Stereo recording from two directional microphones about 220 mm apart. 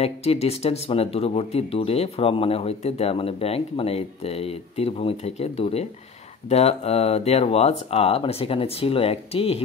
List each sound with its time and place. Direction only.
0.0 s speech: 30° left (ahead or behind)